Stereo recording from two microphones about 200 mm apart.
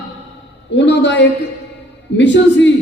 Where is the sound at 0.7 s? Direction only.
60° left (ahead or behind).